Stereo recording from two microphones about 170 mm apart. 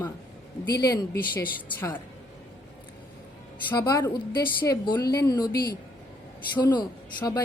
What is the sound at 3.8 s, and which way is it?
A woman's voice, 20° left (ahead or behind).